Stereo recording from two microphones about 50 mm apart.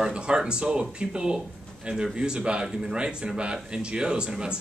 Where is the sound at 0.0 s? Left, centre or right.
Centre.